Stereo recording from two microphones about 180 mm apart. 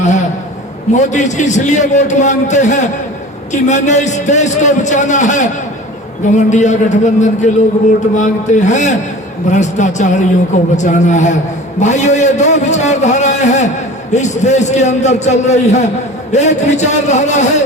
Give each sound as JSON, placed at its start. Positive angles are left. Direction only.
{"t": 0.9, "sound": "a man's voice", "side_deg": 40}